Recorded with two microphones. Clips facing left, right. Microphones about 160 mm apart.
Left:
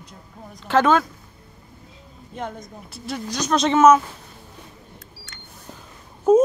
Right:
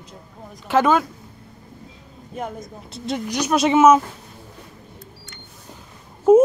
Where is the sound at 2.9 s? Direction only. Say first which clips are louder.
Right 4 dB; 20° right (ahead or behind).